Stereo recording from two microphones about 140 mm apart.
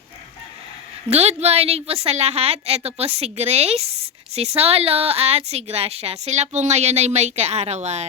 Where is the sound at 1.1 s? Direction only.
50° right (ahead or behind).